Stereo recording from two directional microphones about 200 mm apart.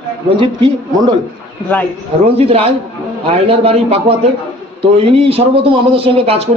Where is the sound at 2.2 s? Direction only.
30° right (ahead or behind).